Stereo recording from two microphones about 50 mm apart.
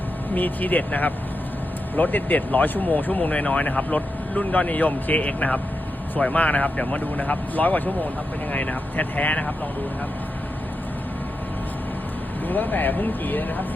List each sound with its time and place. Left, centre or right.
0.3 s speech: left
12.5 s speech: left